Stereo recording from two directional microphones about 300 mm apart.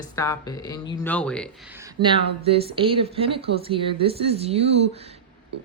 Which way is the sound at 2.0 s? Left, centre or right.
Centre.